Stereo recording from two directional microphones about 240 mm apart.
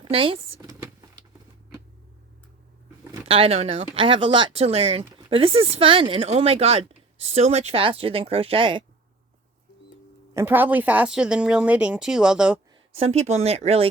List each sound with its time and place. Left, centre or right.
0.0 s a sound: right
3.2 s speech: right
10.3 s speech: centre
13.0 s speech: right